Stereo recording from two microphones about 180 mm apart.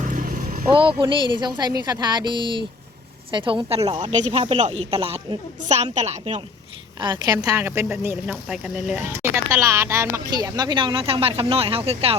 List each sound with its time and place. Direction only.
0.0 s vehicle: 45° right (ahead or behind)
0.7 s a woman's voice: 30° right (ahead or behind)
7.0 s speech: 25° right (ahead or behind)
8.0 s speech: 5° right (ahead or behind); by 12.1 s 30° right (ahead or behind)